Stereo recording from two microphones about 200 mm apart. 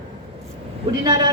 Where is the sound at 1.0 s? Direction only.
20° right (ahead or behind).